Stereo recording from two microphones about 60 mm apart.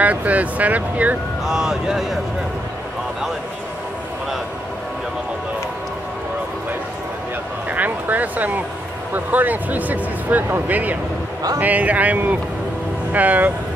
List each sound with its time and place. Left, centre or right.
0.0 s speech: right
1.4 s speech: centre
7.7 s speech: right